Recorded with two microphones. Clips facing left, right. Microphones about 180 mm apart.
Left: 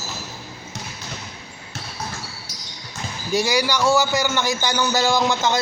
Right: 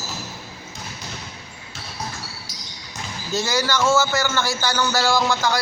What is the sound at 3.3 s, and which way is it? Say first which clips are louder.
A man's voice: left 2 dB; 15° left (ahead or behind).